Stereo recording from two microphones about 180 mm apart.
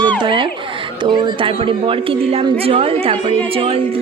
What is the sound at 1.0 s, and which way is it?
A woman's voice, 25° right (ahead or behind).